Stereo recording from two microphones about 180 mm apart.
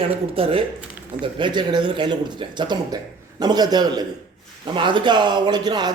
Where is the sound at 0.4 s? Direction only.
30° right (ahead or behind).